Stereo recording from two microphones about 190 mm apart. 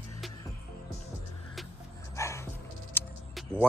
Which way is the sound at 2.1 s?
15° left (ahead or behind).